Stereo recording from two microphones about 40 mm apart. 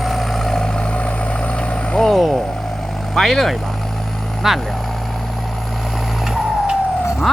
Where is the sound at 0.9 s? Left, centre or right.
Left.